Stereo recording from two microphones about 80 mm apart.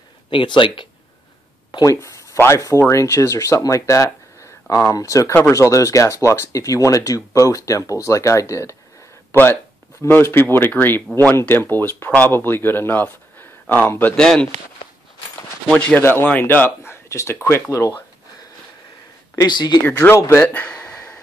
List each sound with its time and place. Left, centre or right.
0.3 s speech: left
1.9 s speech: left
9.3 s speech: left
14.1 s speech: centre
16.0 s speech: left
17.6 s speech: left
19.4 s speech: left
19.8 s speech: left
20.4 s a sound: centre